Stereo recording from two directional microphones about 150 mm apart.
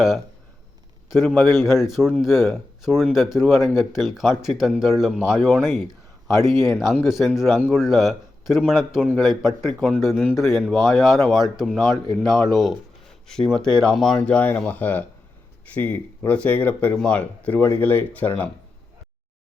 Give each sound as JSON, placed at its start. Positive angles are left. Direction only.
{"t": 1.1, "sound": "speech", "side_deg": 0}
{"t": 6.8, "sound": "speech", "side_deg": 15}
{"t": 7.1, "sound": "speech", "side_deg": 0}